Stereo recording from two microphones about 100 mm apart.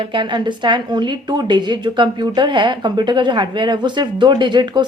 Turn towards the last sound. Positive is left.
turn(degrees=-50)  # may be behind; listen again after turning